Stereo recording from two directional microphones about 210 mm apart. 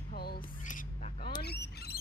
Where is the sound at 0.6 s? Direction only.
40° left (ahead or behind).